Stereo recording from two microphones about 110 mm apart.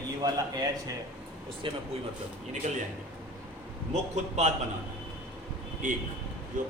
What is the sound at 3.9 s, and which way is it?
Speech, 90° right.